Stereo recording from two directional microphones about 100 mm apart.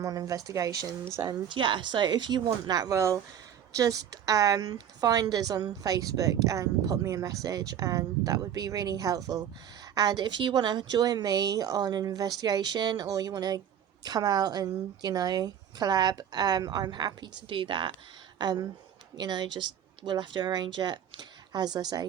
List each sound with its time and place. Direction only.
0.0 s a woman's voice: 35° right (ahead or behind)
1.3 s a woman's voice: 55° right (ahead or behind)
17.5 s a woman's voice: 55° right (ahead or behind)